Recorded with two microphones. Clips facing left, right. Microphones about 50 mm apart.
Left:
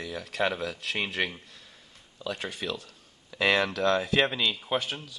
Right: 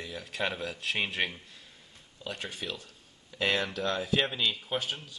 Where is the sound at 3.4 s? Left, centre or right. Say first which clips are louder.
Left 5 dB; left.